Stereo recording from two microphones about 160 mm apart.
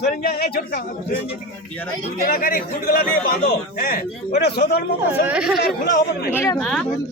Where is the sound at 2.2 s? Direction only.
60° left (ahead or behind); by 4.8 s 90° left.